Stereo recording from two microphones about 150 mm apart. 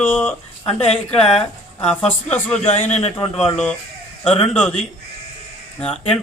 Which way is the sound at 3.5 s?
5° left (ahead or behind).